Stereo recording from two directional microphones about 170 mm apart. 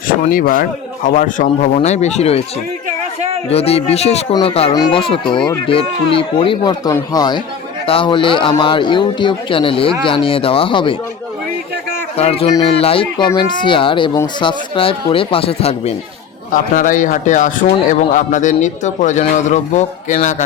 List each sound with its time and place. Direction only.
0.1 s speech: 55° left (ahead or behind); by 2.4 s 40° left (ahead or behind)
3.5 s a man's voice: 35° left (ahead or behind)
12.1 s a man's voice: 35° left (ahead or behind)
16.5 s speech: 50° left (ahead or behind)